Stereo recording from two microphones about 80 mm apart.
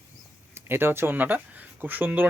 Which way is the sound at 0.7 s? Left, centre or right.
Right.